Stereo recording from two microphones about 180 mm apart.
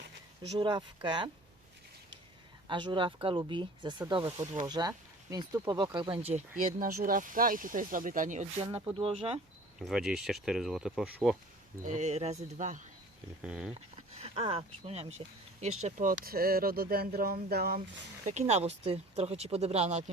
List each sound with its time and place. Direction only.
0.6 s speech: 25° right (ahead or behind)
2.6 s speech: 25° right (ahead or behind)
6.3 s speech: 45° right (ahead or behind); by 9.4 s 30° right (ahead or behind)
9.8 s speech: centre (ahead or behind)
11.9 s speech: 40° right (ahead or behind)
13.4 s speech: 5° right (ahead or behind)
13.9 s speech: 30° right (ahead or behind)
16.1 s speech: 55° right (ahead or behind)
18.3 s speech: 40° right (ahead or behind)